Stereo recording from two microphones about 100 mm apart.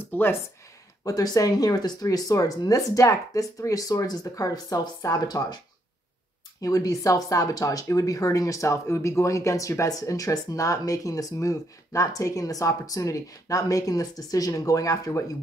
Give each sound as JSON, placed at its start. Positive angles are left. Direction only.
{"t": 0.0, "sound": "a sound", "side_deg": 20}
{"t": 1.0, "sound": "speech", "side_deg": 35}
{"t": 6.6, "sound": "speech", "side_deg": 35}